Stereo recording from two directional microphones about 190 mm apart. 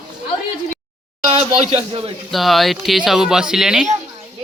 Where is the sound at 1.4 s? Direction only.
35° right (ahead or behind).